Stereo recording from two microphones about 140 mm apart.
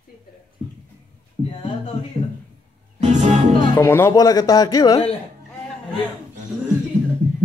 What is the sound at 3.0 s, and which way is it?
Music, 60° right (ahead or behind).